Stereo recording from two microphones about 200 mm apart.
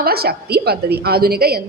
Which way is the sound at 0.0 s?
50° right (ahead or behind).